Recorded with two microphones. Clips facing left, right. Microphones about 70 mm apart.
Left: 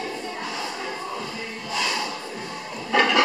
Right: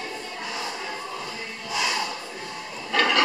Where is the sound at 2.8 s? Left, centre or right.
Centre.